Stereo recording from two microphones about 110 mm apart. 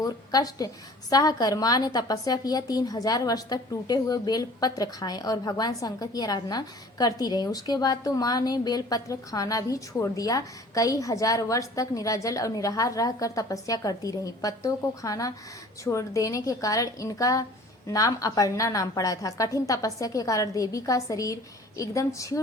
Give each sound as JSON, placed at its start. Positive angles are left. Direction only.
{"t": 0.0, "sound": "a woman's voice", "side_deg": 35}